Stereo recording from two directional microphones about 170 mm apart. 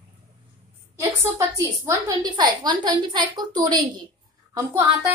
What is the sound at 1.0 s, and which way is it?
A woman's voice, 20° right (ahead or behind).